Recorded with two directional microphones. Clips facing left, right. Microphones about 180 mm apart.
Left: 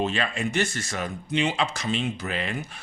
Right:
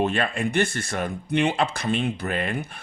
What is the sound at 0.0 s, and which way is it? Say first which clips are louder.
Speech: right 3 dB; 55° right (ahead or behind).